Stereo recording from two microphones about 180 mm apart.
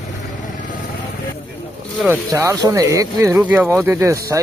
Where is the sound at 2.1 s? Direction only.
15° right (ahead or behind).